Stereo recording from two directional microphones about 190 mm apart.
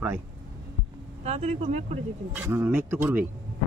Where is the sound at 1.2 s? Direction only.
35° right (ahead or behind).